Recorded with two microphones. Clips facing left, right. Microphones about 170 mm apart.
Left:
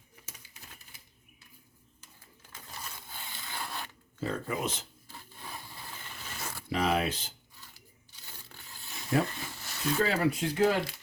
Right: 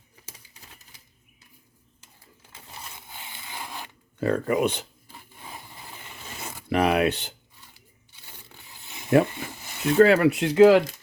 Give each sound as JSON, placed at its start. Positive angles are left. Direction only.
{"t": 2.5, "sound": "a sound", "side_deg": -25}
{"t": 4.2, "sound": "speech", "side_deg": -65}
{"t": 5.4, "sound": "wood", "side_deg": -15}
{"t": 6.4, "sound": "zipper", "side_deg": -15}
{"t": 6.7, "sound": "speech", "side_deg": -65}
{"t": 8.6, "sound": "a sound", "side_deg": -20}
{"t": 10.0, "sound": "speech", "side_deg": -70}